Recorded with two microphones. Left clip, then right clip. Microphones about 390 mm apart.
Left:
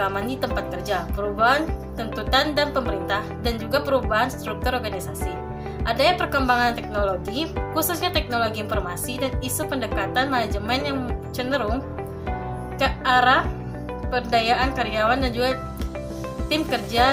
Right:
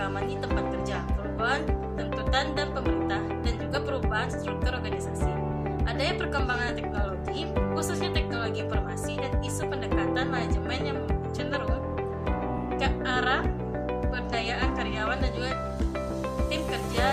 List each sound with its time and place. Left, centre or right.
0.0 s music: left
1.4 s speech: left
2.3 s music: left
5.9 s speech: left
12.8 s music: left
14.1 s speech: left